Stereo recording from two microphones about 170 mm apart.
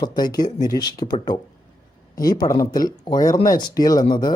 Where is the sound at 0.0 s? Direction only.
25° left (ahead or behind).